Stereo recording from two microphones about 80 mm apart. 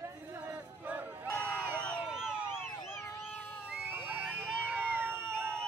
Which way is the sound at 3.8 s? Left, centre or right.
Right.